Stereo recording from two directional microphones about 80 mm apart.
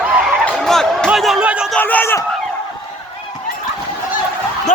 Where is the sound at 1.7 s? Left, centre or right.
Left.